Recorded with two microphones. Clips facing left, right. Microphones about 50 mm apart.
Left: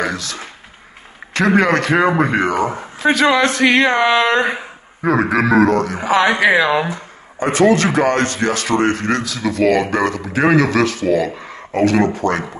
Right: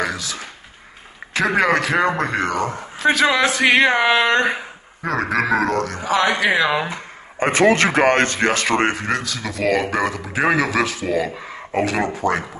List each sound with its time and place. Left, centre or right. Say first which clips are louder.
0.0 s a sound: left 2 dB; centre
1.3 s a man's voice: left 3 dB; centre
6.0 s speech: left 4 dB; left
6.6 s a man's voice: left 3 dB; centre
7.5 s speech: left 2 dB; right
8.9 s a man's voice: left 3 dB; centre